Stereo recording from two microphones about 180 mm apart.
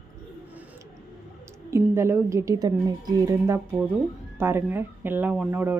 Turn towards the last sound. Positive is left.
turn(degrees=-10)  # may be behind; listen again after turning